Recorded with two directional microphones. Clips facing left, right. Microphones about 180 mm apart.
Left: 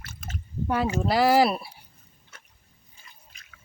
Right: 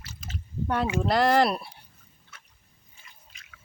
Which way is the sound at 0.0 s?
55° left (ahead or behind).